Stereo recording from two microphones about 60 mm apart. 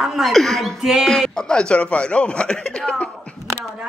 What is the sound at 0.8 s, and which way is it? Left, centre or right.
Speech, centre.